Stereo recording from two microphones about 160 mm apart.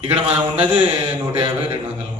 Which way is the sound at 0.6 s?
40° right (ahead or behind).